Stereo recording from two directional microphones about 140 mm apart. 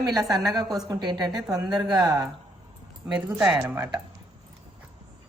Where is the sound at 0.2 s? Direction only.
25° right (ahead or behind).